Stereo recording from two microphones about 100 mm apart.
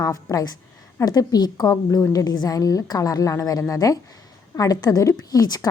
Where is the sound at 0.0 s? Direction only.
35° left (ahead or behind).